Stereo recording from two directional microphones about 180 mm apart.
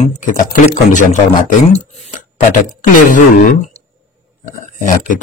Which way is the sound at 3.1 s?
45° left (ahead or behind).